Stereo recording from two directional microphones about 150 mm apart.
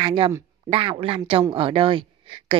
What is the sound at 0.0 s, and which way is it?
Speech, 35° right (ahead or behind).